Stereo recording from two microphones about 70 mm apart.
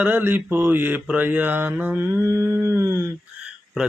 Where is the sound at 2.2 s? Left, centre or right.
Right.